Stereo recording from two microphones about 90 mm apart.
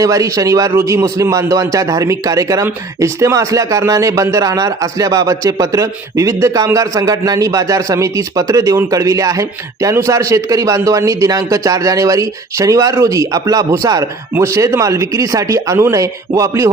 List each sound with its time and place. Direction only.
0.0 s speech: 40° right (ahead or behind)